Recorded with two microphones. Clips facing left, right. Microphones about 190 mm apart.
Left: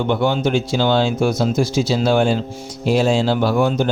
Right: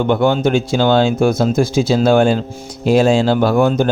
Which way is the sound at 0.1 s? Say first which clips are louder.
Right 4 dB; 50° right (ahead or behind).